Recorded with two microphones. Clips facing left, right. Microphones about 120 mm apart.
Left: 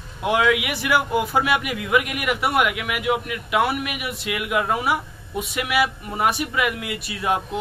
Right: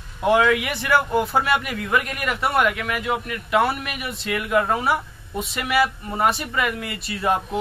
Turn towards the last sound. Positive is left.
turn(degrees=0)  # may be behind; listen again after turning